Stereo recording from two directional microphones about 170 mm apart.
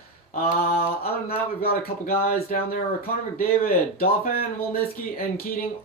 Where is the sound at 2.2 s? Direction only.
60° left (ahead or behind).